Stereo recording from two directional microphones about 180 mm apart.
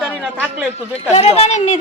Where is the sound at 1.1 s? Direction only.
35° left (ahead or behind).